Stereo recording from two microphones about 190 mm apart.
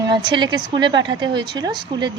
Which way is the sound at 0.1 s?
25° right (ahead or behind).